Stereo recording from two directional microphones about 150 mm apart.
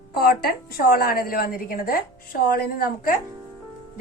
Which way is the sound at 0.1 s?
80° left.